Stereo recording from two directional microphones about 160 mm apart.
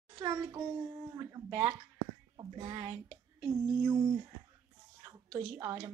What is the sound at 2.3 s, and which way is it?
Speech, 30° right (ahead or behind).